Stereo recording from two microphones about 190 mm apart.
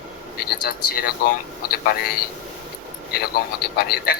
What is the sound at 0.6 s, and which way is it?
Speech, 50° left (ahead or behind).